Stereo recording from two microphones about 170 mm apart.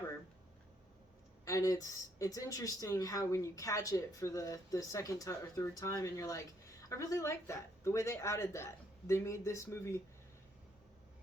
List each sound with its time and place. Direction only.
1.5 s speech: 20° left (ahead or behind)